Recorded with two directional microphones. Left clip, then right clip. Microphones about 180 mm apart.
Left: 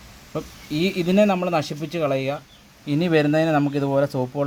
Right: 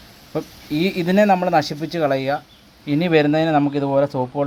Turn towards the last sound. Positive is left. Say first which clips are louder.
# right 3 dB
turn(degrees=10)  # may be behind; listen again after turning